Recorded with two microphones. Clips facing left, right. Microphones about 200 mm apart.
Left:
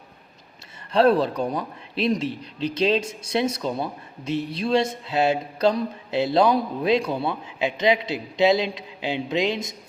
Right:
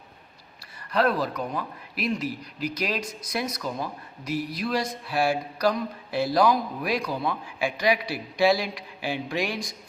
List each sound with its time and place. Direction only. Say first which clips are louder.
0.9 s speech: left 6 dB; 30° left (ahead or behind)